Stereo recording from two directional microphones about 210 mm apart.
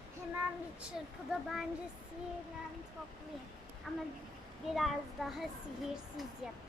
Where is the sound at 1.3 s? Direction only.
Centre (ahead or behind).